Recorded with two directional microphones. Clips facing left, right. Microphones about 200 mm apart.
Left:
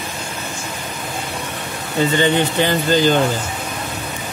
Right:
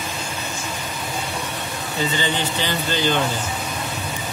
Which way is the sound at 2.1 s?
50° left (ahead or behind).